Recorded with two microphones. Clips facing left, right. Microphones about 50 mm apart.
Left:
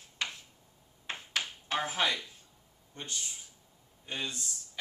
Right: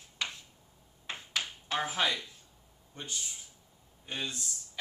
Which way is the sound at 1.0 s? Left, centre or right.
Left.